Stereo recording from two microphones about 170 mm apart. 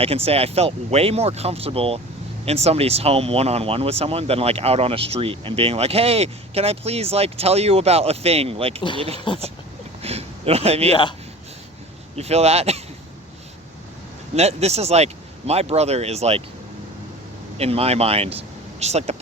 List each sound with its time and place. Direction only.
0.0 s speech: 35° right (ahead or behind)
10.0 s a sound: 35° right (ahead or behind)
12.1 s speech: 40° right (ahead or behind)
14.3 s speech: 40° right (ahead or behind)
17.6 s speech: 35° right (ahead or behind)